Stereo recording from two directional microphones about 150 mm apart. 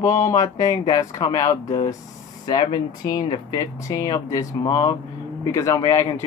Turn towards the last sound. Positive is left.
turn(degrees=20)  # may be behind; listen again after turning